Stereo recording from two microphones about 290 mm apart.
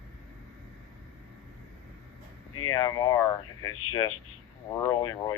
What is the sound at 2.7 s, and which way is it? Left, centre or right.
Speech, centre.